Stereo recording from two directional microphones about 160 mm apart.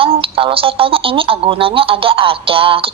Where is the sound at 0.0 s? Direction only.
35° right (ahead or behind).